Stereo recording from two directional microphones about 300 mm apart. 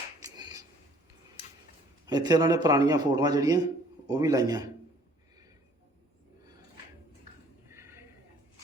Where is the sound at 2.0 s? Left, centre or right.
Centre.